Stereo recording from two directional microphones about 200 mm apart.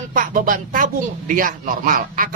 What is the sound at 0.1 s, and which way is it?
Speech, 40° right (ahead or behind).